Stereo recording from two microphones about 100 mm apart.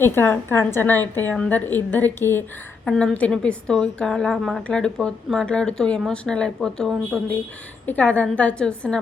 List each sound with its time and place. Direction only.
0.0 s a woman's voice: 20° left (ahead or behind)
2.8 s a woman's voice: 10° left (ahead or behind)